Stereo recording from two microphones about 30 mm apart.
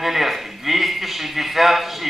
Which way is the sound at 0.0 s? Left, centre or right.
Centre.